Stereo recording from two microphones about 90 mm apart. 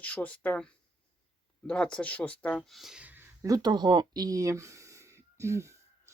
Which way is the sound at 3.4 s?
45° right (ahead or behind).